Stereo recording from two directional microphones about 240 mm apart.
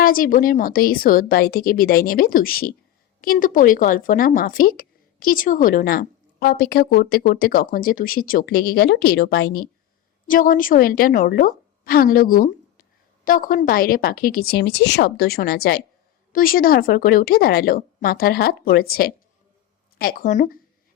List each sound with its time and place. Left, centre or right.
0.0 s speech: left